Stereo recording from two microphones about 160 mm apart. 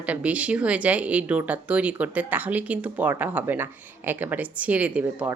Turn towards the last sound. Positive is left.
turn(degrees=-10)  # may be behind; listen again after turning